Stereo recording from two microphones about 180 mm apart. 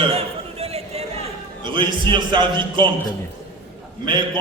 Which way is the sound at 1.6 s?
25° right (ahead or behind).